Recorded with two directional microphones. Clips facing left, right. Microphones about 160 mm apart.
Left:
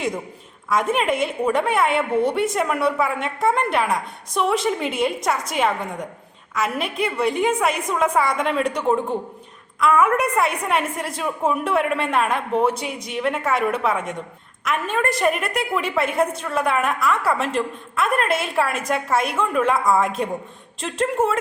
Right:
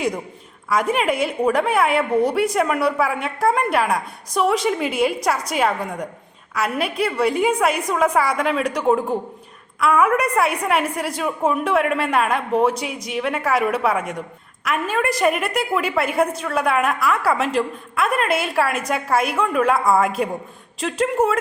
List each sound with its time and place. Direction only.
0.7 s a woman's voice: centre (ahead or behind)